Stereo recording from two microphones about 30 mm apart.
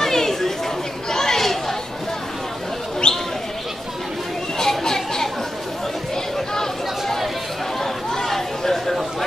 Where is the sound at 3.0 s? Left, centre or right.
Left.